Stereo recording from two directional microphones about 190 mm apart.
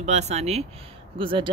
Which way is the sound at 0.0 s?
35° right (ahead or behind).